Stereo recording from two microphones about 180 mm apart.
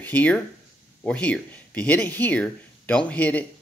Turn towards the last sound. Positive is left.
turn(degrees=10)  # may be behind; listen again after turning